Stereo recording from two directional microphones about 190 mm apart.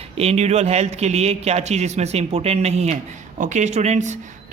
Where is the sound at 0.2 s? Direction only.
35° right (ahead or behind).